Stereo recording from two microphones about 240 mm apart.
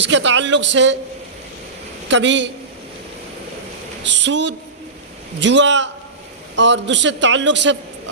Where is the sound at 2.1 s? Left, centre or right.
Right.